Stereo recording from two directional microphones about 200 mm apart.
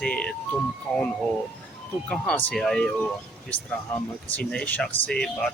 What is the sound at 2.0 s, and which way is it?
Speech, 5° left (ahead or behind).